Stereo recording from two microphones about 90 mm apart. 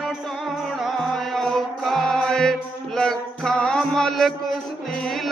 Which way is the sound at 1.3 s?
Centre (ahead or behind).